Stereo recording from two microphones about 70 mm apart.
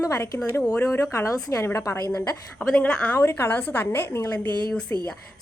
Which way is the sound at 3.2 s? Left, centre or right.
Left.